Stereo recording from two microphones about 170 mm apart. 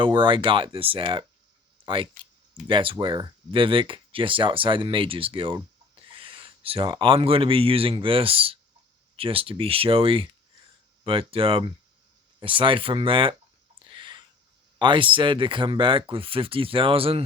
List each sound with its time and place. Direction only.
0.0 s speech: 30° right (ahead or behind)
13.8 s a sound: 30° right (ahead or behind)
14.8 s speech: 30° right (ahead or behind)